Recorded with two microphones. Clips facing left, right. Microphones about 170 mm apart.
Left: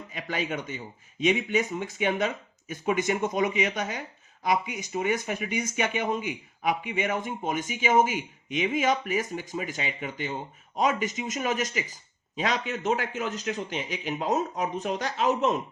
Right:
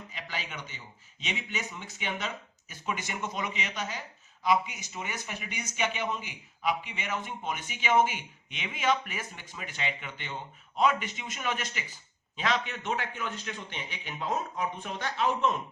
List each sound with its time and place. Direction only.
0.1 s a man's voice: 50° left (ahead or behind)